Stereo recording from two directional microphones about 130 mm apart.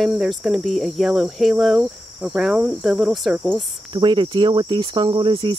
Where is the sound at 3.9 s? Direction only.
35° right (ahead or behind).